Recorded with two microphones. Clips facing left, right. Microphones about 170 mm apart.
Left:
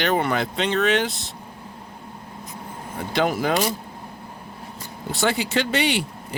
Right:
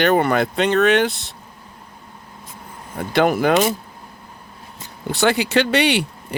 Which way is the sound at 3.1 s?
60° right (ahead or behind).